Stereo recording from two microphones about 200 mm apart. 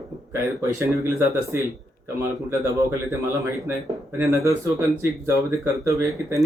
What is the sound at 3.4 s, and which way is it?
Speech, 15° right (ahead or behind).